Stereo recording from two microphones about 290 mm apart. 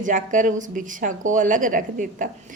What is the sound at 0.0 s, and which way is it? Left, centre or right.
A woman's voice, right.